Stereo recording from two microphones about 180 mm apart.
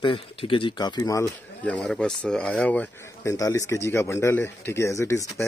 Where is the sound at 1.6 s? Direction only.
5° left (ahead or behind).